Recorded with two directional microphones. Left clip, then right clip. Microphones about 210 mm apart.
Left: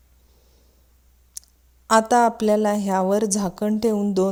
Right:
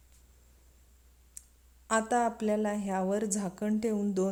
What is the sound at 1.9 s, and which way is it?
A woman's voice, 35° left (ahead or behind).